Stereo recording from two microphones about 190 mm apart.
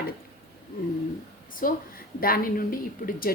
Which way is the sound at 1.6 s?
45° left (ahead or behind).